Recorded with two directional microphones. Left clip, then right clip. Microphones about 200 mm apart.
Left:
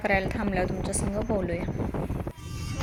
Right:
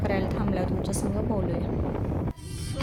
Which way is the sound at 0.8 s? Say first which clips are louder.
Right 1 dB; 35° right (ahead or behind).